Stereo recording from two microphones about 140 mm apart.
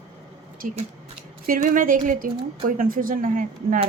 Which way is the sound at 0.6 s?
80° right.